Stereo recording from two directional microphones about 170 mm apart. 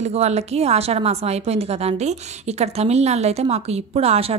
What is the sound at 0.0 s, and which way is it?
A woman's voice, 40° right (ahead or behind).